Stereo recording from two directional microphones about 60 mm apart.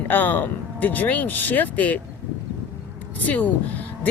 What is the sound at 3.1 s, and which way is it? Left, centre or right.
Speech, left.